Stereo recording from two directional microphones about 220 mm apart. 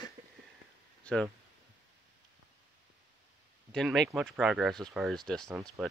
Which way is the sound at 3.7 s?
Centre (ahead or behind).